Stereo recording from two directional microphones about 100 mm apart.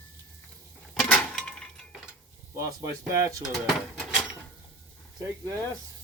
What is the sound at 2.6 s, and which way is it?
Speech, 30° right (ahead or behind).